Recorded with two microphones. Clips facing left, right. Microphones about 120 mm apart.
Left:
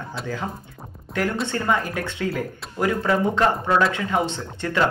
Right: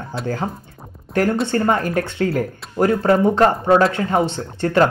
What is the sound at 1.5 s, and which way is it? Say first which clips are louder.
Speech: right 5 dB; 45° right (ahead or behind).